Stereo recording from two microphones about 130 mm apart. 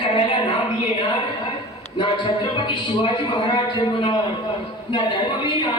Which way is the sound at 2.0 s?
35° left (ahead or behind).